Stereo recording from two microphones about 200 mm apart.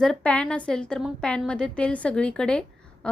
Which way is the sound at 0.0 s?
5° left (ahead or behind).